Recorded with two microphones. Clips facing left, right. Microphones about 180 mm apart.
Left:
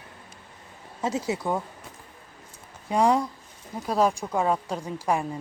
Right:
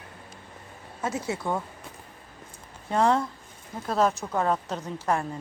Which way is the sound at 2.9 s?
15° left (ahead or behind).